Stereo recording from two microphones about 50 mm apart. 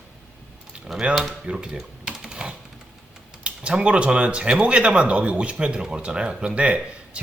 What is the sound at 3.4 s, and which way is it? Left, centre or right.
Speech, right.